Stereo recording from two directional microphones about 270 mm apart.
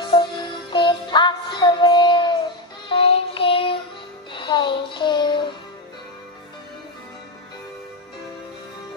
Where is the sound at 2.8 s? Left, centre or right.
Left.